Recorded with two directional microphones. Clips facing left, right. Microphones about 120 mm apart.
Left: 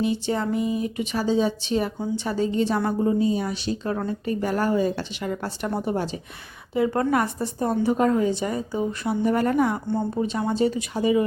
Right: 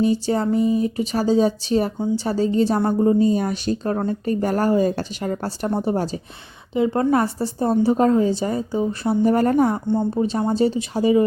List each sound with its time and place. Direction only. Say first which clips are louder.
0.0 s speech: right 5 dB; 40° right (ahead or behind)
6.7 s speech: right 3 dB; 25° right (ahead or behind)
9.8 s a woman's voice: right 5 dB; 20° right (ahead or behind)
10.1 s speech: right 4 dB; 35° right (ahead or behind)